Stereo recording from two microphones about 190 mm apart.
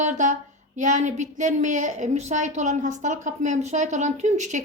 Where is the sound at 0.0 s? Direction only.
40° right (ahead or behind).